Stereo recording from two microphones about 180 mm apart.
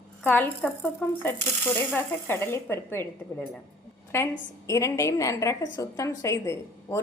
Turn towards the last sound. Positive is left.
turn(degrees=15)  # may be behind; listen again after turning